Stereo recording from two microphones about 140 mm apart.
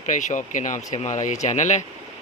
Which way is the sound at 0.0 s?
60° left (ahead or behind).